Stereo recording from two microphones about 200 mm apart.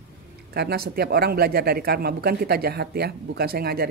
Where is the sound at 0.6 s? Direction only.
50° right (ahead or behind).